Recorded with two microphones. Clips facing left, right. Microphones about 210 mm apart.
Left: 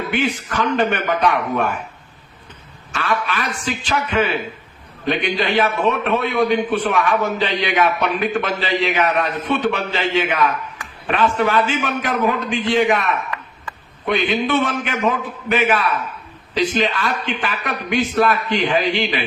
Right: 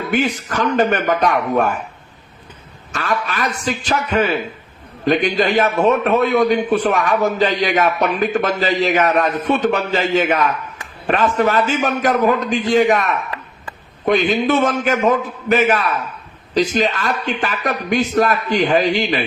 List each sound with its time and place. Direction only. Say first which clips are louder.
0.1 s a man's voice: right 5 dB; 40° right (ahead or behind)
2.9 s a man's voice: even; 40° right (ahead or behind)